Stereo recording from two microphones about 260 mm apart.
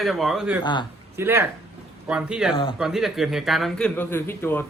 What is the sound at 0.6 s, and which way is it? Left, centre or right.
Speech, centre.